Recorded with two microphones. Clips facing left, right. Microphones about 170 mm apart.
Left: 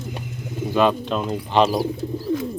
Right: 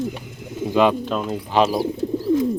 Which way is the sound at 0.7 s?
15° right (ahead or behind).